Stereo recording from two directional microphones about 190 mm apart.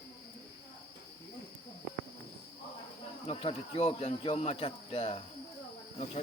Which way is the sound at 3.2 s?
30° left (ahead or behind).